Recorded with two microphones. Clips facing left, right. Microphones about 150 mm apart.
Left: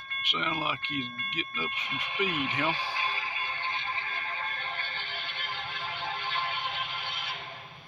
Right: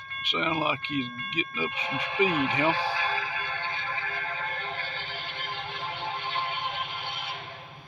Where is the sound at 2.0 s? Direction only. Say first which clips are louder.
Right 6 dB; 90° right.